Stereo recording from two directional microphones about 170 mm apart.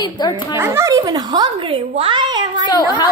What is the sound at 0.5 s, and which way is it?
A woman's voice, 15° right (ahead or behind).